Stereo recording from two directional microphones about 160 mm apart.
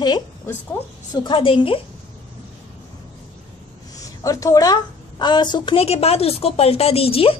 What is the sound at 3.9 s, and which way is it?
A woman's voice, 20° left (ahead or behind).